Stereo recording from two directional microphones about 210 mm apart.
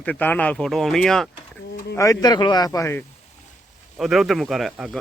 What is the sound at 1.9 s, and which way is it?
Speech, 15° left (ahead or behind).